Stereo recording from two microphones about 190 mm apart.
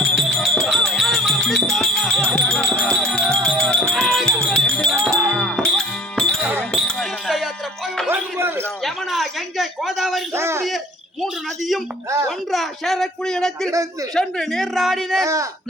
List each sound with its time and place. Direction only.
0.0 s music: 5° left (ahead or behind)
8.1 s music: 10° right (ahead or behind)
8.8 s a sound: centre (ahead or behind)
10.3 s a sound: 15° right (ahead or behind)
11.2 s a man's voice: centre (ahead or behind)
15.2 s a man's voice: 20° right (ahead or behind)